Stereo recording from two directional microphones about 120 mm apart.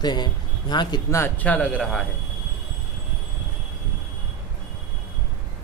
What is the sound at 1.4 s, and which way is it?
Speech, 10° left (ahead or behind).